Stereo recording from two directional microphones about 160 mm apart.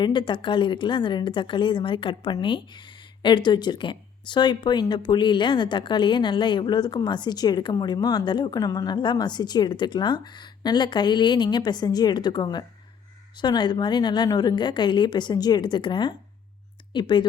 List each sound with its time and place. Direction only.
0.0 s a woman's voice: 30° left (ahead or behind)